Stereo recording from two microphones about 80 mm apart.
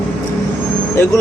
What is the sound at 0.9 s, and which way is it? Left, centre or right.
Speech, left.